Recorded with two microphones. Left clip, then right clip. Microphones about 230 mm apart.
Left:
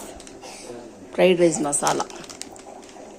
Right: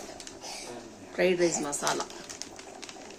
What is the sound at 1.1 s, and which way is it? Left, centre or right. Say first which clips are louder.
Speech: left 8 dB; centre.